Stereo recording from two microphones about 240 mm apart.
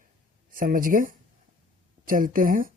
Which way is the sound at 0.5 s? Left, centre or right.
Right.